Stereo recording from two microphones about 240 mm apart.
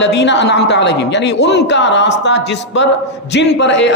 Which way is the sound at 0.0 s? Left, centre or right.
Left.